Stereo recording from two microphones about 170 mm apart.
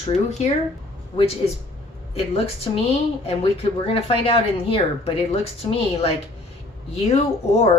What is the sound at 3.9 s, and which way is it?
Speech, 30° left (ahead or behind).